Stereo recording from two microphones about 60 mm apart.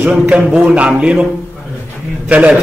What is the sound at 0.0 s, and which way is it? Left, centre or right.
A man's voice, right.